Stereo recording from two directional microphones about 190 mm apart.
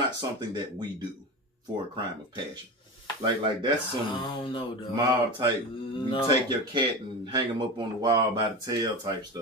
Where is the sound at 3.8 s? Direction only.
25° left (ahead or behind).